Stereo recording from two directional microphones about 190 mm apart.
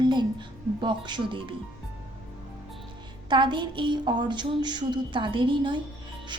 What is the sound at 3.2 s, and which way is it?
A woman's voice, 25° right (ahead or behind).